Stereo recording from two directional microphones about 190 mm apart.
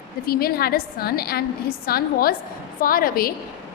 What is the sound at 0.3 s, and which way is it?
A woman's voice, 55° left (ahead or behind).